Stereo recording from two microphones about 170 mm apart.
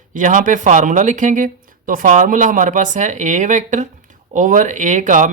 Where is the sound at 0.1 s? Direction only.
50° right (ahead or behind).